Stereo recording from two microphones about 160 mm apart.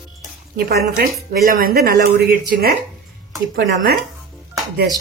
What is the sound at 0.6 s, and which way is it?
Speech, 80° right.